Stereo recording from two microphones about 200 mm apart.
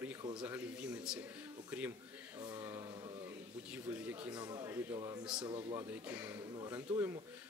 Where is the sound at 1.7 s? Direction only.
10° right (ahead or behind).